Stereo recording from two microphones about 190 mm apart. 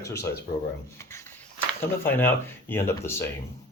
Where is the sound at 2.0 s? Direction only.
10° left (ahead or behind).